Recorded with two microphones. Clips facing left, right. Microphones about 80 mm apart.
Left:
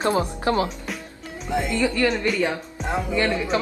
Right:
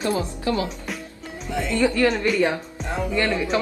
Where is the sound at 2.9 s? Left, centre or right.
Centre.